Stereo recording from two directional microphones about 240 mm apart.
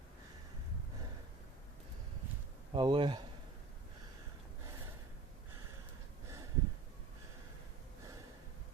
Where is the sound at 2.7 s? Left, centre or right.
Right.